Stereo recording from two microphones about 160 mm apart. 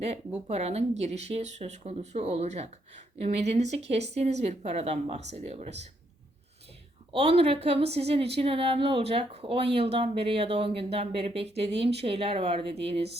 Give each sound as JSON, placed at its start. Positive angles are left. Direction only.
{"t": 0.4, "sound": "speech", "side_deg": -40}
{"t": 7.1, "sound": "a woman's voice", "side_deg": -35}